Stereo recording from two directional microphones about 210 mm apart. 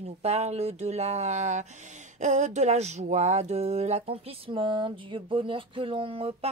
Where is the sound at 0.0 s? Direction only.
30° right (ahead or behind).